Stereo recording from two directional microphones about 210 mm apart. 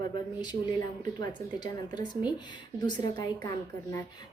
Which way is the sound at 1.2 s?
20° left (ahead or behind).